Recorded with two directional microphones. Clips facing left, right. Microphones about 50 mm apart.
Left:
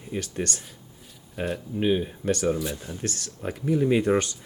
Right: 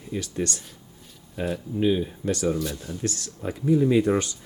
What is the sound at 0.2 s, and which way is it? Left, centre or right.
Speech, left.